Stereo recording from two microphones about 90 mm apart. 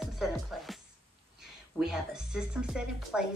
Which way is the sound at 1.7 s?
5° right (ahead or behind).